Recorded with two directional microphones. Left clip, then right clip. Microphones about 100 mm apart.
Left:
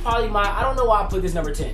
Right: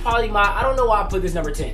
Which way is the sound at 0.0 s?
Centre (ahead or behind).